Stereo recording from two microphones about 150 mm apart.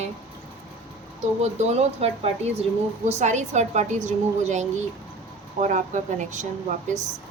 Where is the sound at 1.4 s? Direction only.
45° right (ahead or behind).